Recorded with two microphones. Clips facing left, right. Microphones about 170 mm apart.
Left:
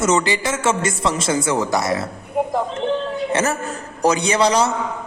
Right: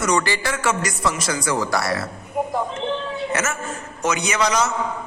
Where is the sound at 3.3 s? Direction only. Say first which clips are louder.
Left 4 dB; 35° left (ahead or behind).